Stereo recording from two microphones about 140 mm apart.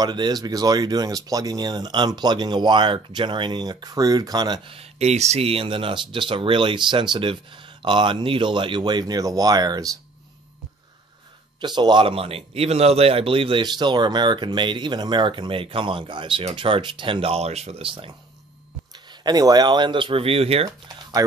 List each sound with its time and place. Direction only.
0.0 s speech: 30° right (ahead or behind)
4.7 s a man's voice: 50° right (ahead or behind); by 9.8 s 30° right (ahead or behind)
11.6 s a man's voice: 30° right (ahead or behind)
19.2 s a man's voice: 30° right (ahead or behind); by 20.6 s 45° right (ahead or behind)
20.6 s speech: 25° right (ahead or behind)